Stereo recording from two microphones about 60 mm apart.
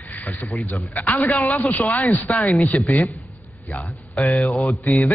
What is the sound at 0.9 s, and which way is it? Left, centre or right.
A man's voice, left.